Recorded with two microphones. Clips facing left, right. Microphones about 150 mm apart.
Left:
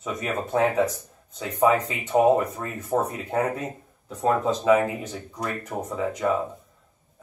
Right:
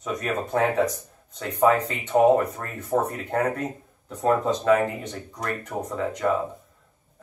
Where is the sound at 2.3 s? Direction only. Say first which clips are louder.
Right 1 dB; 15° left (ahead or behind).